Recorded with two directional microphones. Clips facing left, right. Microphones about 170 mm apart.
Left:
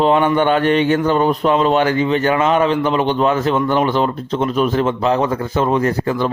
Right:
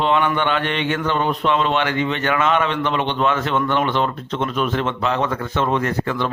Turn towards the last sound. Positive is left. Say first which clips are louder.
# left 4 dB
turn(degrees=35)  # may be behind; listen again after turning